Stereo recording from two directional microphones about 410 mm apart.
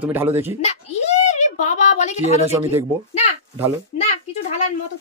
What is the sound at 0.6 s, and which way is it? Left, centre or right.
A child's voice, centre.